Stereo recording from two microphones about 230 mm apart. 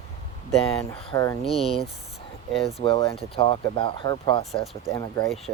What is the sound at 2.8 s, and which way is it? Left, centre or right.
Speech, left.